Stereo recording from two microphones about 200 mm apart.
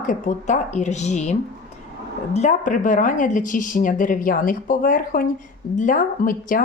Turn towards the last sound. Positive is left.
turn(degrees=45)  # may be behind; listen again after turning